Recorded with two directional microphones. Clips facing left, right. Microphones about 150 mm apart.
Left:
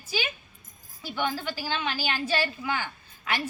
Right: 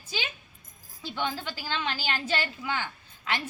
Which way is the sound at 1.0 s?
10° left (ahead or behind).